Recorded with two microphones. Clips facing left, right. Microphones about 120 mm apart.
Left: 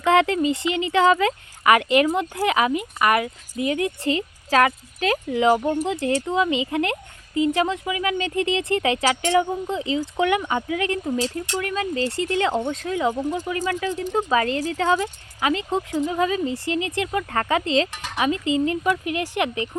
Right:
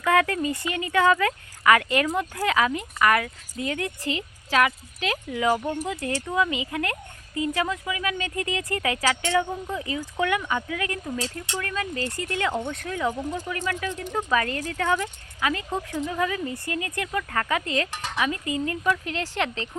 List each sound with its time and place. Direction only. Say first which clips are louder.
0.0 s speech: left 4 dB; 25° left (ahead or behind)
4.0 s a woman's voice: left 6 dB; 35° left (ahead or behind)
5.4 s speech: left 5 dB; 25° left (ahead or behind)